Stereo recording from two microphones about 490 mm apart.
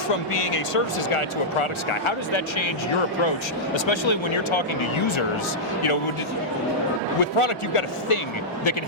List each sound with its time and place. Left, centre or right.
0.3 s speech: left
3.8 s speech: left
7.2 s a man's voice: left